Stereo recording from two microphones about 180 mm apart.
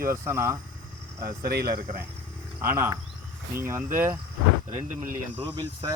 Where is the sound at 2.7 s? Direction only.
15° right (ahead or behind).